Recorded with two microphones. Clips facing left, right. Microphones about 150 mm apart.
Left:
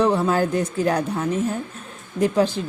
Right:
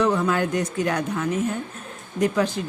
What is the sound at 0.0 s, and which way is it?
Speech, 30° left (ahead or behind).